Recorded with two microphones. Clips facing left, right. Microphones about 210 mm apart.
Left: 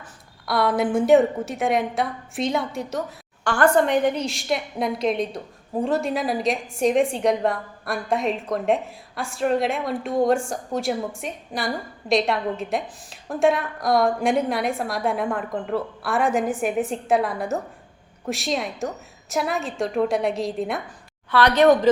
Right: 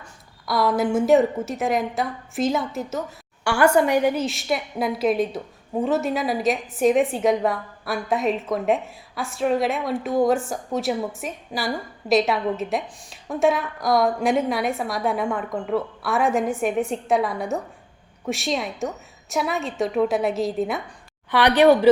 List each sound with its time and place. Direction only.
0.4 s a woman's voice: centre (ahead or behind)
21.2 s a woman's voice: 15° right (ahead or behind)